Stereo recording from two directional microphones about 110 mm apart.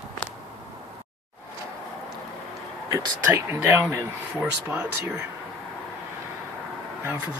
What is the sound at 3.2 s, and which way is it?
Speech, 20° right (ahead or behind).